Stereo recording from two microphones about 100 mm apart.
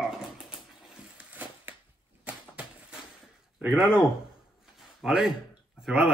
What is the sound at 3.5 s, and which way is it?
Speech, 5° right (ahead or behind).